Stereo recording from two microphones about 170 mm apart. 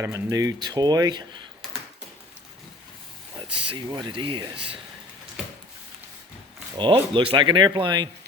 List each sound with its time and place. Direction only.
0.0 s speech: 20° right (ahead or behind)
3.3 s speech: 25° right (ahead or behind)
6.7 s speech: 30° right (ahead or behind)